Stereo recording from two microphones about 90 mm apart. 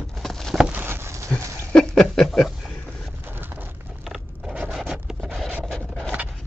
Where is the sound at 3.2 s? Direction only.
20° right (ahead or behind).